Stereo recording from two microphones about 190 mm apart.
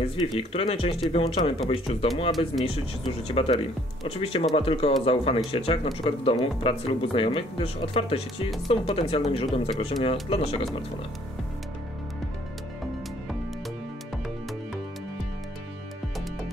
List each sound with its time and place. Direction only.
0.1 s speech: 25° left (ahead or behind)